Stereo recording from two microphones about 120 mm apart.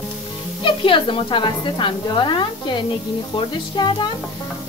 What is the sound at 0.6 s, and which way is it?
Speech, 45° left (ahead or behind).